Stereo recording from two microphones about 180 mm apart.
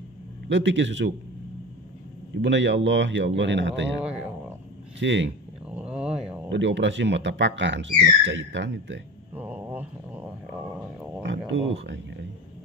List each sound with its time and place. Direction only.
0.5 s speech: 90° right
2.4 s a man's voice: 85° right
4.0 s speech: 5° right (ahead or behind)
4.9 s speech: 90° right
5.7 s a sound: 5° right (ahead or behind)
6.5 s speech: 85° right
9.3 s a sound: 10° right (ahead or behind)
11.2 s speech: 90° right